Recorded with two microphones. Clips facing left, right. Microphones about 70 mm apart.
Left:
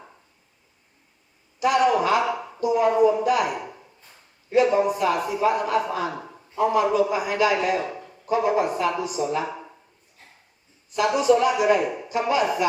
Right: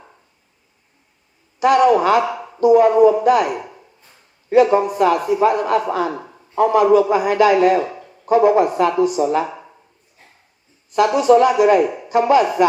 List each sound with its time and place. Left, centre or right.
1.5 s speech: right
4.4 s speech: right
10.9 s speech: right